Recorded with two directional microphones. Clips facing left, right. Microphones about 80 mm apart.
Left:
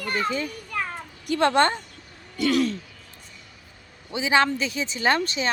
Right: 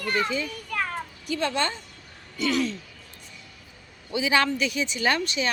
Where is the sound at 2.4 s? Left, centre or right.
Left.